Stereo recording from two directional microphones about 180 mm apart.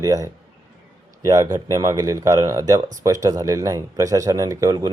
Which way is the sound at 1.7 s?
20° right (ahead or behind).